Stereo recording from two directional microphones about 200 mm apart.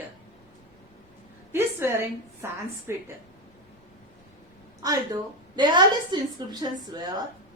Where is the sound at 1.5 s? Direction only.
15° right (ahead or behind).